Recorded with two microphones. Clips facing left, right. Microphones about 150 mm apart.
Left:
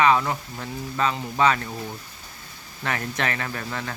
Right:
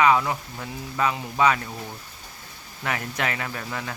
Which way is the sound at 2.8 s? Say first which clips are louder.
Left 1 dB; 10° right (ahead or behind).